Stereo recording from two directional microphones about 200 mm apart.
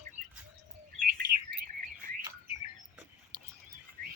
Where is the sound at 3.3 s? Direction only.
20° right (ahead or behind).